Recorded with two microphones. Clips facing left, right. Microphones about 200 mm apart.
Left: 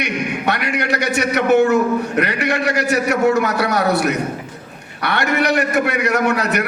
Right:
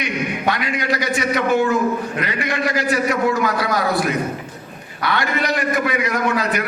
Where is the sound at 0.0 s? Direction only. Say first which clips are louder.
Left 1 dB; 70° left (ahead or behind).